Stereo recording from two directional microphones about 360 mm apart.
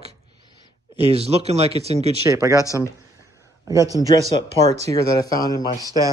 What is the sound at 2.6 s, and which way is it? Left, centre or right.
Speech, centre.